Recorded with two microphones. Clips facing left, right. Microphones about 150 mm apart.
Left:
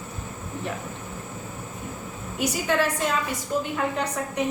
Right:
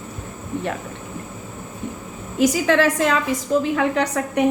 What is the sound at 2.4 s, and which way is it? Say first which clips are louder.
A woman's voice: right 7 dB; 90° right.